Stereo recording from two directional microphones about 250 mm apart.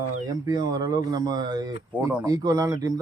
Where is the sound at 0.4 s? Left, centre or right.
Centre.